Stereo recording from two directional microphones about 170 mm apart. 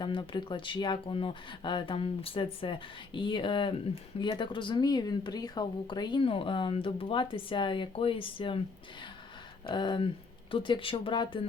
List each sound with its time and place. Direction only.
0.0 s speech: 25° left (ahead or behind)
9.6 s speech: 25° left (ahead or behind)